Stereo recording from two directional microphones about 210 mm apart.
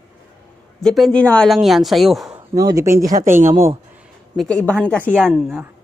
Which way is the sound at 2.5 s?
15° right (ahead or behind).